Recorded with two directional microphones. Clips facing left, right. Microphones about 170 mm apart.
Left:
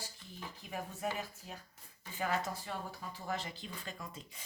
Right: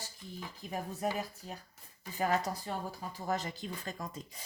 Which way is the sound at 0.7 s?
35° right (ahead or behind).